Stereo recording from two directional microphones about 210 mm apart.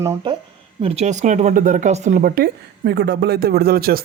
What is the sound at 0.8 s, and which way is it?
Speech, 30° right (ahead or behind).